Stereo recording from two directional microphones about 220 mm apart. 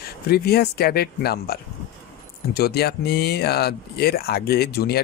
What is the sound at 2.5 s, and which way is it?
Speech, 45° left (ahead or behind).